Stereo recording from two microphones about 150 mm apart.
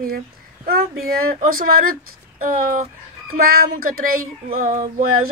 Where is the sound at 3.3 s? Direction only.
80° right.